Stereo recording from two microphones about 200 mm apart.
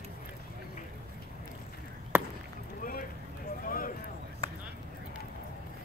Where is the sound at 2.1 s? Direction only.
10° right (ahead or behind).